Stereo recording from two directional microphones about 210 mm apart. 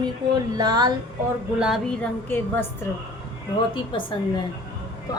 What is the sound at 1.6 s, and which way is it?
Speech, centre (ahead or behind).